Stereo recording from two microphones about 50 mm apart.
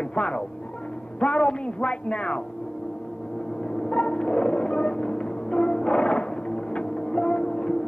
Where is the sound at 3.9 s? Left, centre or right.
Centre.